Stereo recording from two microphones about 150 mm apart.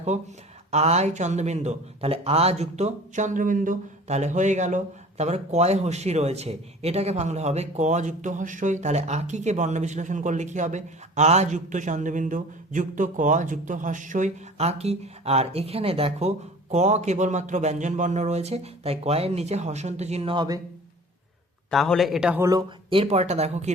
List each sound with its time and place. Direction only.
0.1 s speech: 50° right (ahead or behind); by 20.6 s 30° right (ahead or behind)
21.7 s a man's voice: centre (ahead or behind)
22.4 s speech: 25° right (ahead or behind)
22.9 s speech: 40° right (ahead or behind)